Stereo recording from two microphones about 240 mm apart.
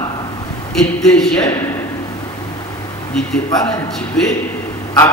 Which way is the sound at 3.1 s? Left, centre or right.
Centre.